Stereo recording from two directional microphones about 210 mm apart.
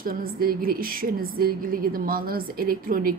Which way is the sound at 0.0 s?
45° right (ahead or behind).